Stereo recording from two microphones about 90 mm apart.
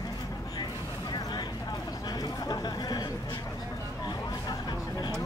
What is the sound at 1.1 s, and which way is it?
Vehicle, 50° left (ahead or behind).